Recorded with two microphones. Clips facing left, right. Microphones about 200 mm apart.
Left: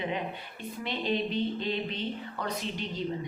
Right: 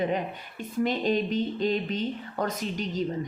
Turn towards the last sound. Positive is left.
turn(degrees=-45)  # may be behind; listen again after turning